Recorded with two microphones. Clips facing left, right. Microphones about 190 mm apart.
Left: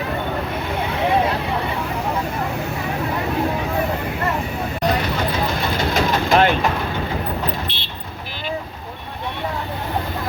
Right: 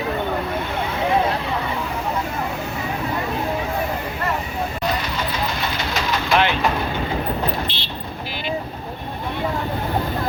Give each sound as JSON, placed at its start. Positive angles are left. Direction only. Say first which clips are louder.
{"t": 5.9, "sound": "vehicle", "louder": "left 3 dB", "side_deg": 45}
{"t": 7.7, "sound": "vehicle", "louder": "right 1 dB", "side_deg": 55}